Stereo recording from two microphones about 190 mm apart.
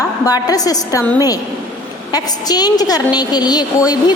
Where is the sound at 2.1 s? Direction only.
20° left (ahead or behind).